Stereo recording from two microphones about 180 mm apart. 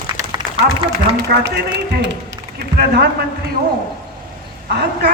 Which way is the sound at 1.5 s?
70° right (ahead or behind).